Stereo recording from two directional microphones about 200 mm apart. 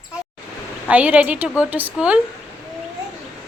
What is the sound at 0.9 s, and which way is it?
A woman's voice, 5° right (ahead or behind).